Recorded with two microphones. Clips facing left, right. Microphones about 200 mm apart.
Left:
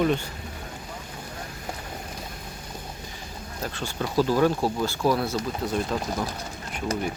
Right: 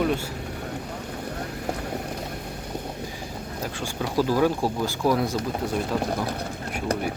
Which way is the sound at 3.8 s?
10° right (ahead or behind).